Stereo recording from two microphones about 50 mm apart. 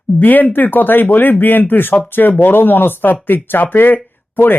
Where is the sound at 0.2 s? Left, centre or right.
Left.